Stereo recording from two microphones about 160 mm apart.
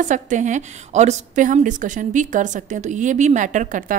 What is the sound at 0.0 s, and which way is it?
A woman's voice, 50° right (ahead or behind).